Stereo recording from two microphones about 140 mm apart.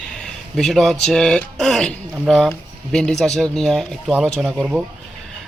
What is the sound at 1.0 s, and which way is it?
Speech, 5° left (ahead or behind).